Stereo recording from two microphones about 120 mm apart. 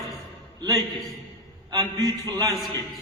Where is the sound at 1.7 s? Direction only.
30° right (ahead or behind).